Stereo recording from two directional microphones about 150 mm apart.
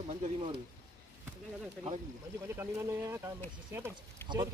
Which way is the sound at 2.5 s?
15° right (ahead or behind).